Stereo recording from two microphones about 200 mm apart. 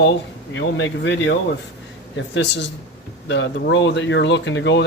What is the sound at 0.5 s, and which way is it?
Speech, 65° left (ahead or behind).